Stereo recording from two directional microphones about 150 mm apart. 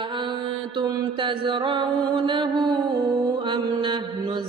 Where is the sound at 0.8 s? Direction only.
35° right (ahead or behind).